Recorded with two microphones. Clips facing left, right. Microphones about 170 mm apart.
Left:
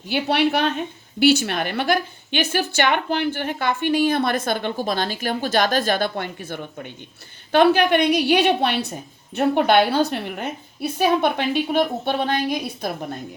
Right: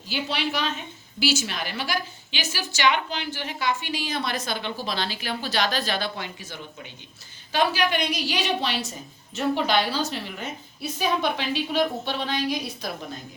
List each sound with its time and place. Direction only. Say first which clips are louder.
0.1 s a woman's voice: left 8 dB; 60° left (ahead or behind)